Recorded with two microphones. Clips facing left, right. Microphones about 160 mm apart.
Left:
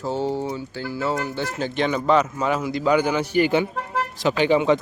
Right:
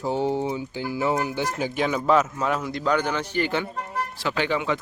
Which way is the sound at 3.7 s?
90° left.